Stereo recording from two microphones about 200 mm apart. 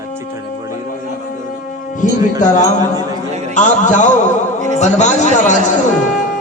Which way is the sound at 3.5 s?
40° left (ahead or behind).